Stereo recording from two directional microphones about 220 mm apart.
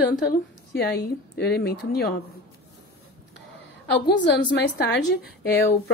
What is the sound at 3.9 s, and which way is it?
Speech, 50° left (ahead or behind).